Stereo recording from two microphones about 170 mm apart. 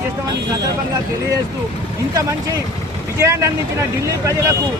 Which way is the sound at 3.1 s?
15° right (ahead or behind).